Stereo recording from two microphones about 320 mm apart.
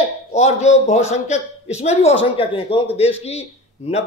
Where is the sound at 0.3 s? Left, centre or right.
Left.